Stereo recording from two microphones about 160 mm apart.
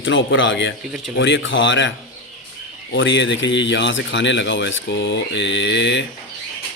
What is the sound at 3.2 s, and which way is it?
Speech, 90° left.